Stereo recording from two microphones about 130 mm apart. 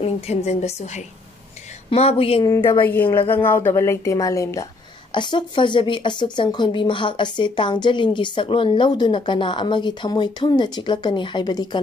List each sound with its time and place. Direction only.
0.0 s a woman's voice: 60° left (ahead or behind)
1.9 s a woman's voice: 50° left (ahead or behind)
2.4 s a woman's voice: 25° left (ahead or behind)
2.8 s a woman's voice: 15° left (ahead or behind)
5.1 s a woman's voice: 40° left (ahead or behind)